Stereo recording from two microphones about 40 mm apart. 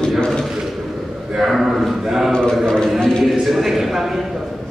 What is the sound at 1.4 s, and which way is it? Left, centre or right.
Speech, centre.